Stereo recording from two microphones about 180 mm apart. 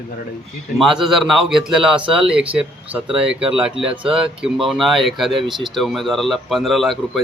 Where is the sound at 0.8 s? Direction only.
Centre (ahead or behind).